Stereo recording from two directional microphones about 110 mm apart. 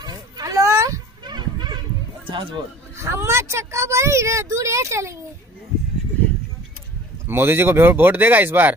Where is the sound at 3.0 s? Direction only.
25° right (ahead or behind).